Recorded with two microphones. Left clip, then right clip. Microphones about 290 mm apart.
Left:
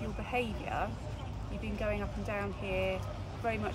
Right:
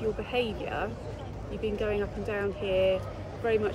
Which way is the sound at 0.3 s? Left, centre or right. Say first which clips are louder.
Right 4 dB; left.